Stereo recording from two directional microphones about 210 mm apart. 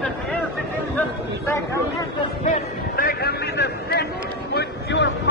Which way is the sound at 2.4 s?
40° left (ahead or behind).